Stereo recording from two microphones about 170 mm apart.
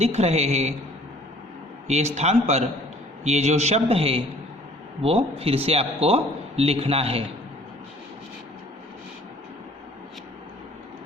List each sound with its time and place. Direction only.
0.0 s a man's voice: 40° right (ahead or behind)
1.9 s a man's voice: 40° right (ahead or behind)